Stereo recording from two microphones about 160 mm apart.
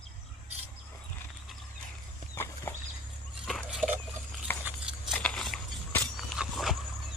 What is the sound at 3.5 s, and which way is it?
Dog, centre (ahead or behind).